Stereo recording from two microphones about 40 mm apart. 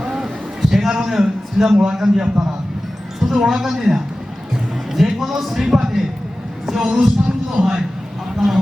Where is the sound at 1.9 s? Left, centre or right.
Centre.